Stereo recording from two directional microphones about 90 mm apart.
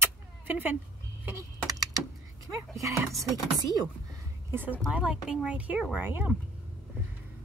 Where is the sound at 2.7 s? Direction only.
35° right (ahead or behind).